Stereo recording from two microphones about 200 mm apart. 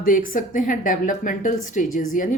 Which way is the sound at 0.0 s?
45° left (ahead or behind).